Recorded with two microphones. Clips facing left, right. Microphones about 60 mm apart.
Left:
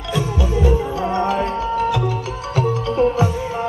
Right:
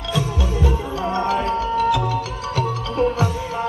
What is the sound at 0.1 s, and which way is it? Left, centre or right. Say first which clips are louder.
Music: left 3 dB; left.